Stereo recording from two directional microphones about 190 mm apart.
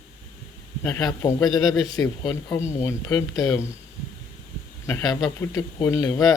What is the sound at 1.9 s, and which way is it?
Speech, 20° left (ahead or behind).